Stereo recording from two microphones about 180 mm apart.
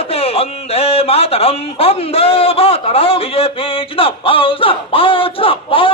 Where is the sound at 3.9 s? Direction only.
30° left (ahead or behind).